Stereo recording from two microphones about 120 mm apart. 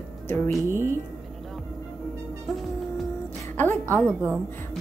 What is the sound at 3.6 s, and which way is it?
Speech, 15° left (ahead or behind).